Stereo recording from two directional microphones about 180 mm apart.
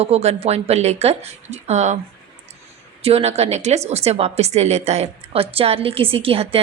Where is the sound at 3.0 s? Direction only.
35° right (ahead or behind).